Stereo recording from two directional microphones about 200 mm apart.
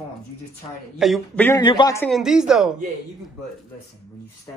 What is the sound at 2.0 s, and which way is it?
Speech, centre (ahead or behind).